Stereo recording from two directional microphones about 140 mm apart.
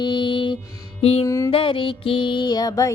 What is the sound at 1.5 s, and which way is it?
Music, 40° left (ahead or behind).